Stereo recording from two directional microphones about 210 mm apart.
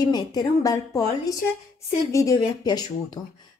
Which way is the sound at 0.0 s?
20° left (ahead or behind).